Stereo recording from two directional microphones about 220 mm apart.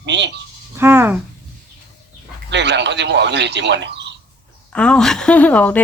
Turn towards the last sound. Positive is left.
turn(degrees=5)  # may be behind; listen again after turning